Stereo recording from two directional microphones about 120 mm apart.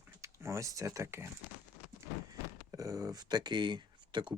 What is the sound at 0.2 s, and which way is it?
Speech, 25° right (ahead or behind).